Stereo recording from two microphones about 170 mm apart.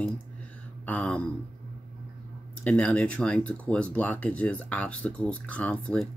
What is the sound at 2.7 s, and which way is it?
Speech, 10° left (ahead or behind).